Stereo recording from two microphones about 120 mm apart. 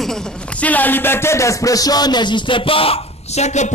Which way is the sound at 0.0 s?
5° left (ahead or behind).